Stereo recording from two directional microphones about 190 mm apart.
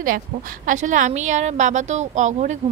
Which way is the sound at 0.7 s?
40° right (ahead or behind).